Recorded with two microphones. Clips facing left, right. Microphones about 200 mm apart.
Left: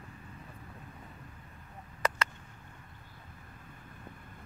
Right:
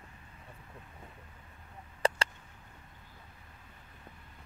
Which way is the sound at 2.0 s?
30° right (ahead or behind).